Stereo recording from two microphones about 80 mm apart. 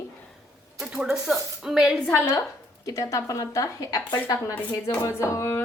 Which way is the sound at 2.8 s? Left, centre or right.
Left.